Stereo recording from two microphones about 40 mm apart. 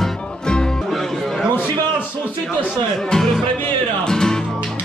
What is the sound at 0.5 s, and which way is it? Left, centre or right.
Music, left.